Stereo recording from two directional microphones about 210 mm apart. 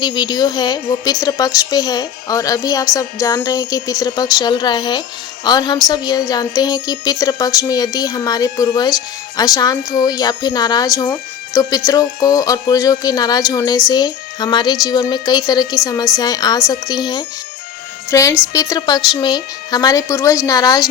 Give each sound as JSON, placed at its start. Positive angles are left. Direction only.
{"t": 0.0, "sound": "speech", "side_deg": 20}